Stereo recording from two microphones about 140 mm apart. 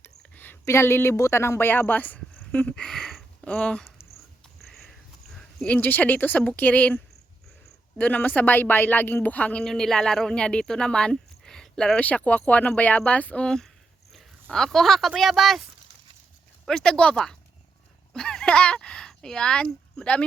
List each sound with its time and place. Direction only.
0.2 s a woman's voice: 15° left (ahead or behind)
2.4 s a sound: 10° left (ahead or behind)
5.4 s speech: 5° left (ahead or behind)
16.6 s speech: 5° left (ahead or behind)